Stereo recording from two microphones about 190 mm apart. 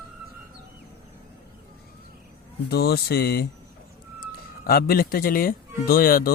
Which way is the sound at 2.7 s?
55° left (ahead or behind).